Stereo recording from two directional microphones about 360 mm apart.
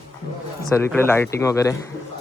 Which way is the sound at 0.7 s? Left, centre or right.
Centre.